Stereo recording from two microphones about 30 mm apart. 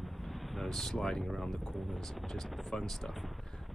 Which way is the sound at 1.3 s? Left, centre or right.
Centre.